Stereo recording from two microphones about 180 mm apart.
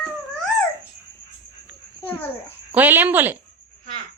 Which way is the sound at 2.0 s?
10° left (ahead or behind).